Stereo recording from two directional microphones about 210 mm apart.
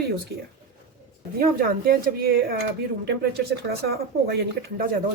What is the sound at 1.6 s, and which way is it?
Speech, 45° right (ahead or behind).